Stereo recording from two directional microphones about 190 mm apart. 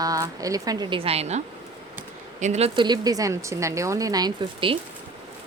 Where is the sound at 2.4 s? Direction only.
35° right (ahead or behind).